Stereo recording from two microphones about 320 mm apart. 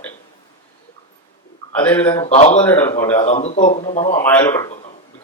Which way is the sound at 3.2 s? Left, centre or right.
Left.